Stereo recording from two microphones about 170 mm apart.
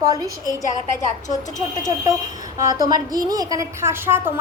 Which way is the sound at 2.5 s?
20° right (ahead or behind).